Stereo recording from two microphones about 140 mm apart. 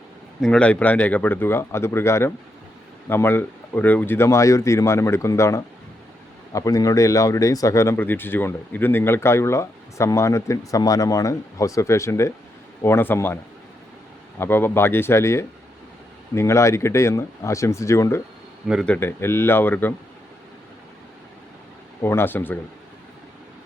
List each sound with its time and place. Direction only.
0.4 s speech: 5° left (ahead or behind)
22.0 s speech: 15° left (ahead or behind)